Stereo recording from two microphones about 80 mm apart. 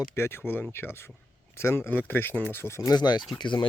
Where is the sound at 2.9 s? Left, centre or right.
Left.